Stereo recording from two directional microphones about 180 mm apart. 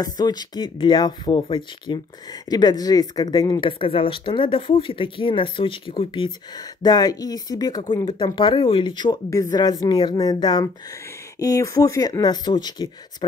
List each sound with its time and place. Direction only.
0.0 s speech: 20° left (ahead or behind)